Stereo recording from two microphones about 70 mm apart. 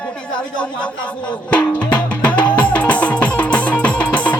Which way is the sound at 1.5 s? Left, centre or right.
Centre.